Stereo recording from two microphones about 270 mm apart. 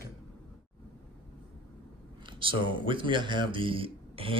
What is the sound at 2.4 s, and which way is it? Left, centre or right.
Speech, centre.